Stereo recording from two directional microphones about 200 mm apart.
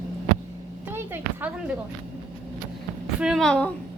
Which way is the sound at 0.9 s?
10° right (ahead or behind).